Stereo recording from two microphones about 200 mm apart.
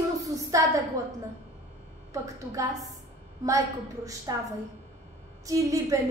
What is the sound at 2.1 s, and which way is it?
A woman's voice, 15° right (ahead or behind).